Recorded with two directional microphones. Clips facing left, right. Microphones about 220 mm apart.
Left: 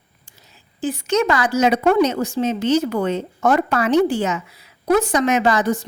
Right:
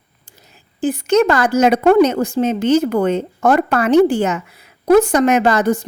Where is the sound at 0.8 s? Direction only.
55° right (ahead or behind).